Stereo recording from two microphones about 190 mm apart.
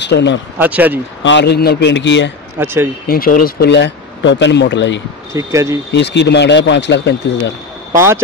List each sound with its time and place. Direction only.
0.0 s speech: 65° left (ahead or behind)
0.6 s speech: 10° right (ahead or behind)
1.2 s a man's voice: 65° left (ahead or behind)
2.6 s speech: 10° right (ahead or behind)
3.1 s speech: 50° left (ahead or behind); by 5.0 s 70° left (ahead or behind)
5.3 s speech: 15° right (ahead or behind)
5.9 s speech: 65° left (ahead or behind)